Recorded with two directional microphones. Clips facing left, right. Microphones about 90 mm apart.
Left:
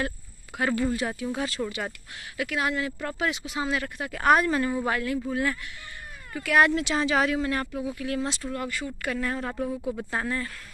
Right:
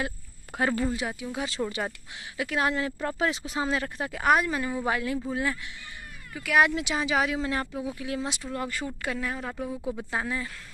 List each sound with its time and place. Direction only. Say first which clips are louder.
0.6 s speech: even; 30° right (ahead or behind)
0.8 s speech: left 3 dB; 10° right (ahead or behind)
1.7 s speech: right 1 dB; 30° right (ahead or behind)
4.2 s speech: left 3 dB; 5° right (ahead or behind)
4.8 s speech: left 1 dB; 20° right (ahead or behind)
6.3 s speech: left 2 dB; 5° right (ahead or behind)
7.3 s speech: left 2 dB; 20° right (ahead or behind)
8.5 s speech: even; 30° right (ahead or behind)
9.2 s speech: left 3 dB; 5° right (ahead or behind)